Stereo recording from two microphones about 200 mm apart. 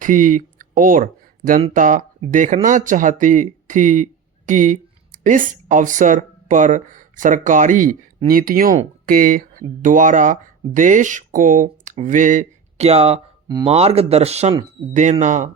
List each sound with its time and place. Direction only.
0.0 s speech: 40° right (ahead or behind)